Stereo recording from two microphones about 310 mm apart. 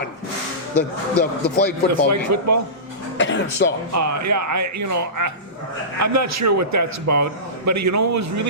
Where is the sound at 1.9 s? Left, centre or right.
Right.